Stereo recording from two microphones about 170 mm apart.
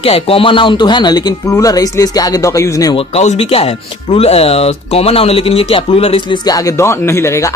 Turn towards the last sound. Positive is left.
turn(degrees=15)  # may be behind; listen again after turning